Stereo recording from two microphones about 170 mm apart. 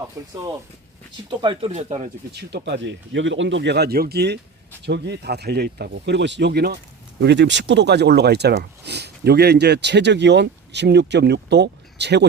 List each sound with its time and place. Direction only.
0.2 s speech: 20° right (ahead or behind)
1.7 s speech: 40° right (ahead or behind)
2.3 s speech: 75° right (ahead or behind)
4.9 s speech: 85° right
7.2 s speech: 85° right